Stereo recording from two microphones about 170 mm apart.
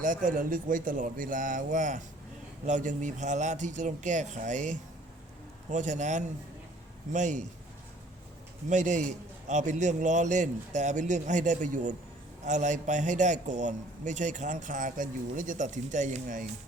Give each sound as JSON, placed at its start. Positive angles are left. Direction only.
{"t": 0.0, "sound": "a man's voice", "side_deg": -50}
{"t": 8.7, "sound": "a man's voice", "side_deg": -45}